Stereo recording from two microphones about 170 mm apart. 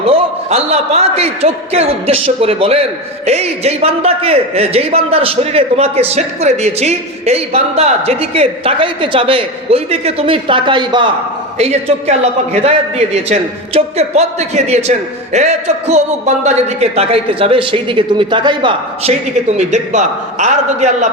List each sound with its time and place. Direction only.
0.0 s a man's voice: 35° right (ahead or behind)
13.2 s a man's voice: 40° right (ahead or behind)
19.5 s a man's voice: 45° right (ahead or behind)